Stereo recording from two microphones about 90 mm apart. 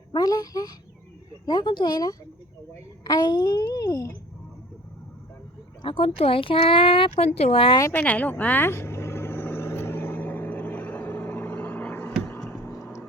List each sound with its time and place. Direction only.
0.1 s a woman's voice: 45° left (ahead or behind)
5.8 s speech: 80° left
7.9 s vehicle: 20° left (ahead or behind)